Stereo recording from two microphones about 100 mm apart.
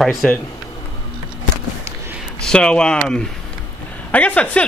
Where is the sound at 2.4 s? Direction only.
10° left (ahead or behind).